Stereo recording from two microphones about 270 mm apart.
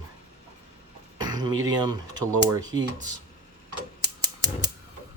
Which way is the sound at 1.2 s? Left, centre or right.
Centre.